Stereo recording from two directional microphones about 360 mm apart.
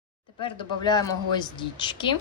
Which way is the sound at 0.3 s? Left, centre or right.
Centre.